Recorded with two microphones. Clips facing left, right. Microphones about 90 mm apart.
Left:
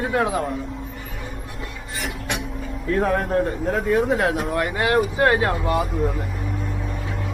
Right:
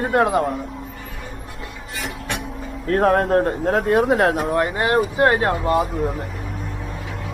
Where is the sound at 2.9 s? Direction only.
45° right (ahead or behind).